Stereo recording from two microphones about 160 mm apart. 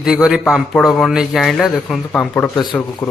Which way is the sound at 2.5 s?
25° left (ahead or behind).